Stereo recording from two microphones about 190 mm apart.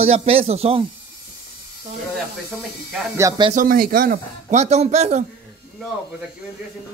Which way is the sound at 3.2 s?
15° right (ahead or behind).